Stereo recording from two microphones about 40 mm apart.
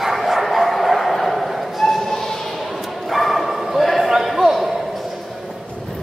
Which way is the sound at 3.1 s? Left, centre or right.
Centre.